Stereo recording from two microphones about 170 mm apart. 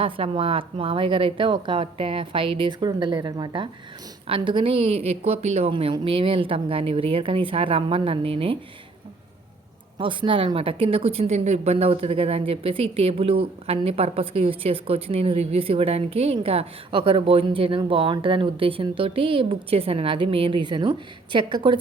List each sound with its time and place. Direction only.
0.0 s speech: 35° right (ahead or behind)
10.0 s a woman's voice: 30° right (ahead or behind)